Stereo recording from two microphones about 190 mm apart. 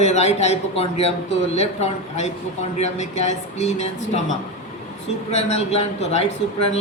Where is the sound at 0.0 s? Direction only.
35° left (ahead or behind).